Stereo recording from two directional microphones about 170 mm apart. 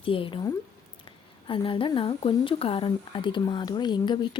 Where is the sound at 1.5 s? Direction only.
30° left (ahead or behind).